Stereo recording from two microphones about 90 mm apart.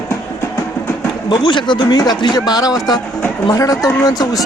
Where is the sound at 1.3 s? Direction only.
60° left (ahead or behind).